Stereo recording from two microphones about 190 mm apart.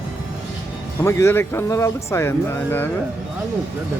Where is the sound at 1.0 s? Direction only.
15° left (ahead or behind).